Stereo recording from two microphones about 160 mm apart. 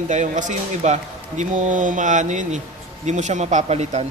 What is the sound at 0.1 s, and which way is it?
A man's voice, 50° right (ahead or behind).